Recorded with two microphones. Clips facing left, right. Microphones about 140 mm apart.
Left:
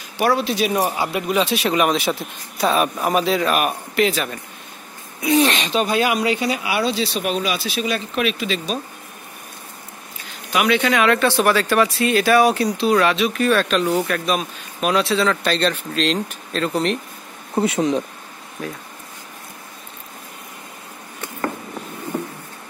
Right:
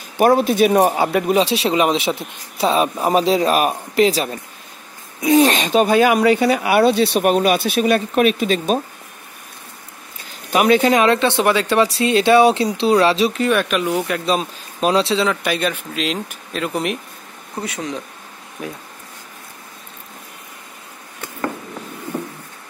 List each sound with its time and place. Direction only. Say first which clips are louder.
0.2 s speech: right 5 dB; 45° right (ahead or behind)
1.3 s speech: right 3 dB; 30° right (ahead or behind); by 8.8 s 45° right (ahead or behind)
10.5 s speech: right 4 dB; 40° right (ahead or behind)
11.1 s speech: right 1 dB; 25° right (ahead or behind)
13.4 s speech: even; 15° right (ahead or behind)
14.2 s speech: right 2 dB; 30° right (ahead or behind)
15.2 s speech: left 1 dB; 10° right (ahead or behind)
17.6 s speech: left 8 dB; 25° left (ahead or behind)
18.6 s speech: even; 20° right (ahead or behind)